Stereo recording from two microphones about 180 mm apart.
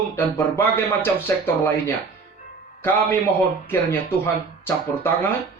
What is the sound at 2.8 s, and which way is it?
Speech, 10° left (ahead or behind).